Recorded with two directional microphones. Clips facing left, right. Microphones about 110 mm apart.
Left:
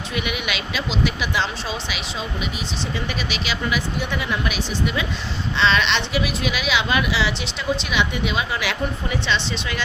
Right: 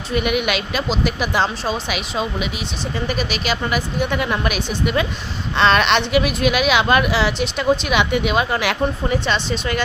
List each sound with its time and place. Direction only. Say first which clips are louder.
0.1 s a woman's voice: right 8 dB; 50° right (ahead or behind)